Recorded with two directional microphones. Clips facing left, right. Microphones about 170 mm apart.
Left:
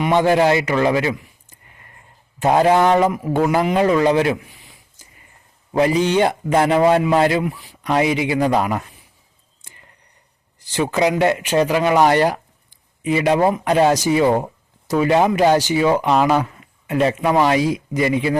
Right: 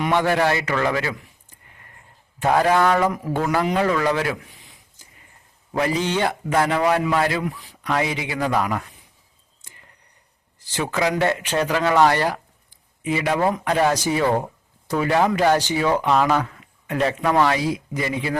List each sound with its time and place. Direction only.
0.1 s a man's voice: 20° left (ahead or behind)
2.5 s a man's voice: 25° left (ahead or behind)
3.1 s speech: 10° left (ahead or behind)
3.8 s a man's voice: 20° left (ahead or behind)
5.7 s a man's voice: 20° left (ahead or behind)
11.2 s a man's voice: 15° left (ahead or behind)